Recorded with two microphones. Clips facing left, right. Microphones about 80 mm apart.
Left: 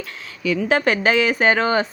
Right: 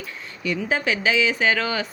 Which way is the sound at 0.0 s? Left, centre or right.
Left.